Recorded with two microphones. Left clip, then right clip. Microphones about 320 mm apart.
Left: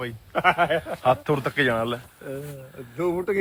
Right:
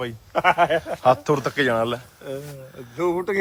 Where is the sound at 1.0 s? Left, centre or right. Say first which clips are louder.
Right 3 dB; centre.